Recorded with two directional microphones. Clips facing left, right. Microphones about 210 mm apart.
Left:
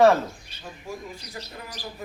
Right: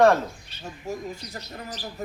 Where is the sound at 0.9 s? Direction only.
40° right (ahead or behind).